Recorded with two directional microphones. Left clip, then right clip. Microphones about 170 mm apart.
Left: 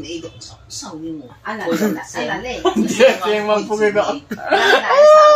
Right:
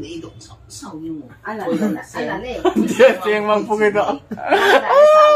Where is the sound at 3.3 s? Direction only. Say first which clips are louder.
Even; 25° right (ahead or behind).